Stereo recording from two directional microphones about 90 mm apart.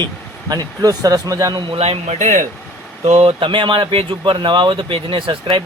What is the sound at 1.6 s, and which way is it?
Speech, 90° right.